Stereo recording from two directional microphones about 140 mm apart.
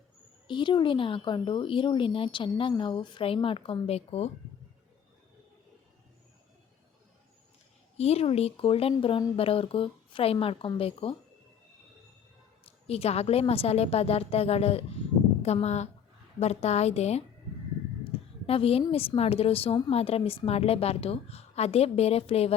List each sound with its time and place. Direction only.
0.4 s speech: 35° left (ahead or behind)
7.9 s a woman's voice: 50° left (ahead or behind)
12.9 s a woman's voice: 45° left (ahead or behind)
18.4 s a woman's voice: 45° left (ahead or behind)